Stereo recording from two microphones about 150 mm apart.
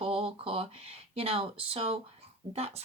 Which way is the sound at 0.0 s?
40° right (ahead or behind).